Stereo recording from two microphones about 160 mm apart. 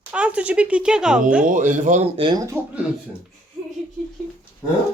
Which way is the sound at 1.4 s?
55° right (ahead or behind).